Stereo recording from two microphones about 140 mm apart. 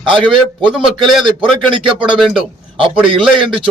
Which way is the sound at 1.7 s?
35° right (ahead or behind).